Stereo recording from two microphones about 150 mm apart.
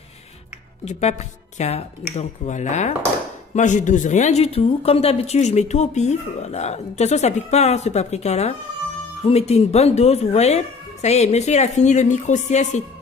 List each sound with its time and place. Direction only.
1.6 s a woman's voice: 45° left (ahead or behind)